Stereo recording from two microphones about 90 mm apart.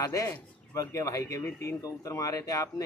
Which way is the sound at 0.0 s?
40° left (ahead or behind).